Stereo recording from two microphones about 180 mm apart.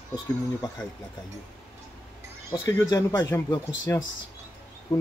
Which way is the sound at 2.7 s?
20° left (ahead or behind).